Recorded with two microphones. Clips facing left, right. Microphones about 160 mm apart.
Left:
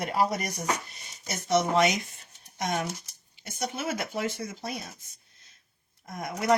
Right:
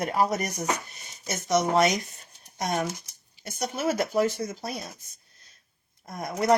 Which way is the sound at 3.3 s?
40° right (ahead or behind).